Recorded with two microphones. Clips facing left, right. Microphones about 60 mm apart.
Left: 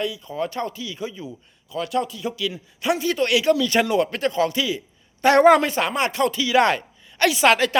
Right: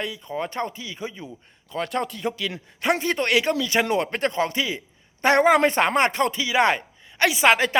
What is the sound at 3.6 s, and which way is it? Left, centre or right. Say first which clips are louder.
Speech: left 3 dB; right.